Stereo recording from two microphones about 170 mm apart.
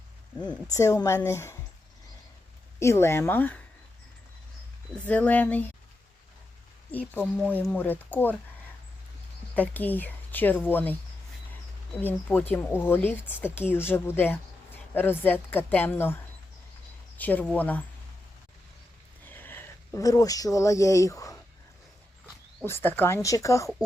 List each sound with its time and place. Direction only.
0.7 s speech: 20° left (ahead or behind)
2.7 s speech: 15° left (ahead or behind)
5.0 s speech: 10° left (ahead or behind)
7.1 s speech: 10° left (ahead or behind)
9.6 s speech: 10° left (ahead or behind)
11.9 s speech: 10° left (ahead or behind)
17.2 s speech: 10° left (ahead or behind)
19.2 s speech: 10° left (ahead or behind)
22.6 s speech: 15° left (ahead or behind)